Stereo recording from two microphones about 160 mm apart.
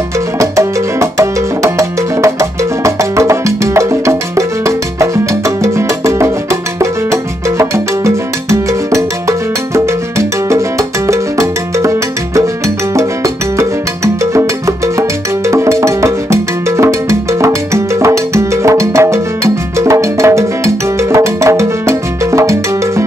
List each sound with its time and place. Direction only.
0.4 s music: 20° right (ahead or behind)